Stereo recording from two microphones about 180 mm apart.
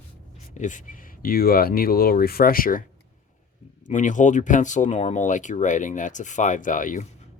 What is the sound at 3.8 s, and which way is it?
Speech, 45° left (ahead or behind).